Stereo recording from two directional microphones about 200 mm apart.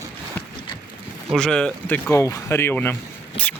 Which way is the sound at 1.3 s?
5° left (ahead or behind).